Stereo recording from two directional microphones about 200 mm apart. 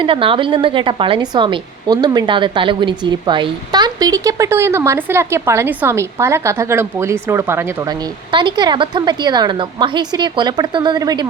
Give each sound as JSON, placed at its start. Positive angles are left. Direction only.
{"t": 0.0, "sound": "a woman's voice", "side_deg": -25}
{"t": 8.3, "sound": "a woman's voice", "side_deg": -25}